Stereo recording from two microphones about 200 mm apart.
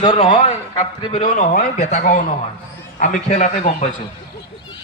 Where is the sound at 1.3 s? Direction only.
40° left (ahead or behind).